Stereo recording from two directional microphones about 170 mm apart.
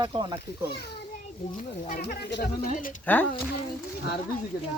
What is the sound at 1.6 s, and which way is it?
Speech, 50° left (ahead or behind).